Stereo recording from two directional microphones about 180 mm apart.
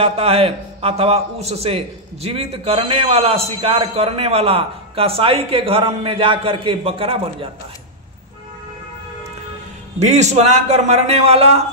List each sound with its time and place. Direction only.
0.0 s a man's voice: 35° right (ahead or behind)
9.9 s a man's voice: 40° right (ahead or behind)